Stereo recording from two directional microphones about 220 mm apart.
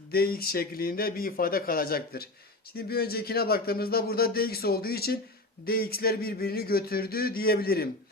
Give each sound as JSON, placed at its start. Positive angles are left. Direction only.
{"t": 0.1, "sound": "speech", "side_deg": 45}